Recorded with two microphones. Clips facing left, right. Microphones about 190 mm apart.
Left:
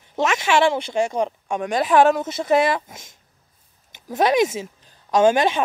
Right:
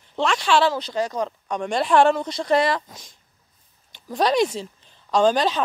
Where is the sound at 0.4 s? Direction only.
25° left (ahead or behind).